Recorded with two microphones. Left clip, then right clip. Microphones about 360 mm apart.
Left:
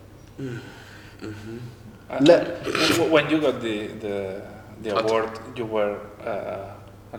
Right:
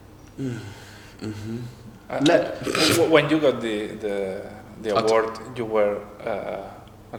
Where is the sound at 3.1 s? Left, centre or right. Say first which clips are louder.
Right 2 dB; right.